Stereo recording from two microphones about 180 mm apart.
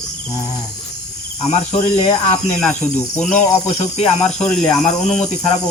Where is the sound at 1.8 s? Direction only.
40° left (ahead or behind).